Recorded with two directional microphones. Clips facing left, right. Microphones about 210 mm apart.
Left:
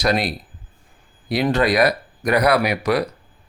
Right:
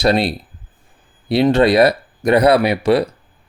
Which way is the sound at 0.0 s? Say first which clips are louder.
Right 5 dB; 30° right (ahead or behind).